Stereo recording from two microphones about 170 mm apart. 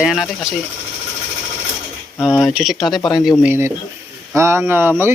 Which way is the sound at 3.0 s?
20° left (ahead or behind).